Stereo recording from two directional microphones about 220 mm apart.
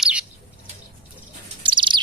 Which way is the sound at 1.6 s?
20° right (ahead or behind).